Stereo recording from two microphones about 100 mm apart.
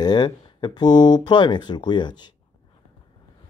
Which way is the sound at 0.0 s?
45° left (ahead or behind).